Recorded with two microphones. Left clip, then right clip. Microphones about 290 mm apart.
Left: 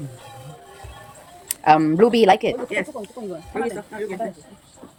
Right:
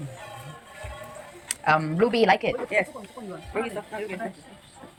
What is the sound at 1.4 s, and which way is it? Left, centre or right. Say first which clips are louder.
Speech: left 7 dB; centre.